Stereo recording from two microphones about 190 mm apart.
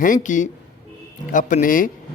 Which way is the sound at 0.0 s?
45° left (ahead or behind).